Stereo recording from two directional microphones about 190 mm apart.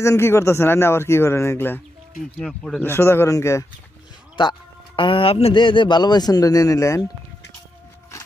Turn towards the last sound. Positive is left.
turn(degrees=15)  # may be behind; listen again after turning